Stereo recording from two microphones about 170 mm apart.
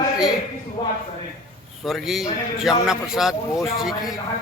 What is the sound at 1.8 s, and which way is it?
A man's voice, centre (ahead or behind).